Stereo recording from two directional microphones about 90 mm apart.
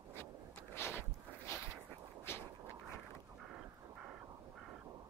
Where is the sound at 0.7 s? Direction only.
25° left (ahead or behind).